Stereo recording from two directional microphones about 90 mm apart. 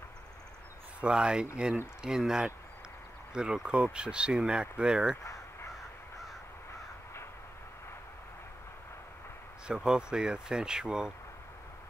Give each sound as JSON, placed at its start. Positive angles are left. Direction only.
{"t": 1.0, "sound": "speech", "side_deg": -10}
{"t": 5.2, "sound": "caw", "side_deg": 35}
{"t": 9.7, "sound": "speech", "side_deg": -10}